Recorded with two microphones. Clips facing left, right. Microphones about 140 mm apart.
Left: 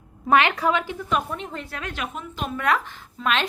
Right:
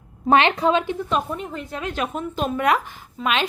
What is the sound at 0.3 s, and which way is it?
A woman's voice, 25° right (ahead or behind).